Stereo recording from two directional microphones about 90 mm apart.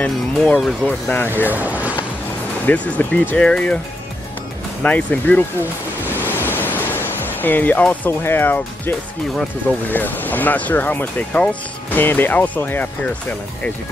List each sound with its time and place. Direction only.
0.0 s speech: 15° left (ahead or behind)
1.5 s a sound: 15° right (ahead or behind)
2.6 s speech: 20° left (ahead or behind)
4.8 s speech: 15° left (ahead or behind)
6.4 s pink noise: 20° left (ahead or behind)
9.8 s speech: 20° left (ahead or behind)